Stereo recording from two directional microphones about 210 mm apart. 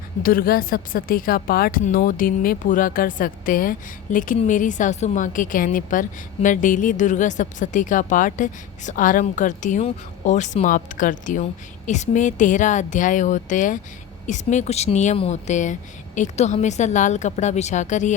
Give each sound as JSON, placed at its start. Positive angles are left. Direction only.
{"t": 0.2, "sound": "a woman's voice", "side_deg": 45}